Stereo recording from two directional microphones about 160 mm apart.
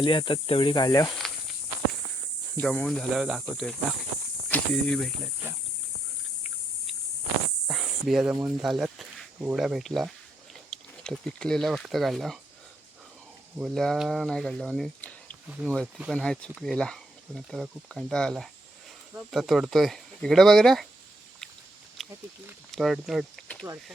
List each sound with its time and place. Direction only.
0.0 s cricket: 30° left (ahead or behind)
2.6 s speech: 5° left (ahead or behind)
7.7 s snake: centre (ahead or behind)
8.4 s speech: centre (ahead or behind)
13.6 s speech: centre (ahead or behind)
22.0 s a sound: centre (ahead or behind)
22.7 s speech: centre (ahead or behind)